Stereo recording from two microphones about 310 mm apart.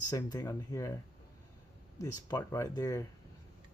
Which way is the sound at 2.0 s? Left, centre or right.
Centre.